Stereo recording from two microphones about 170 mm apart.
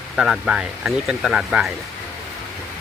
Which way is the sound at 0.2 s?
5° right (ahead or behind).